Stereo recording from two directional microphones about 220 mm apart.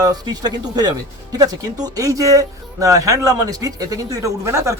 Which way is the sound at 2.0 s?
15° right (ahead or behind).